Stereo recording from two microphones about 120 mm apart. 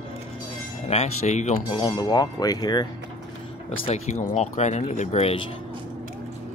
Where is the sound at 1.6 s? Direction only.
40° left (ahead or behind).